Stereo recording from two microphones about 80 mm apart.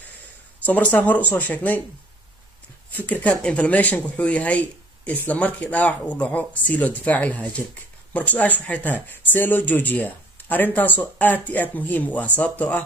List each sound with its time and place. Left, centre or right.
0.7 s speech: left
2.9 s speech: left